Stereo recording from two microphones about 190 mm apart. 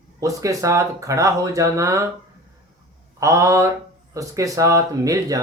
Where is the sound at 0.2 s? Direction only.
15° right (ahead or behind).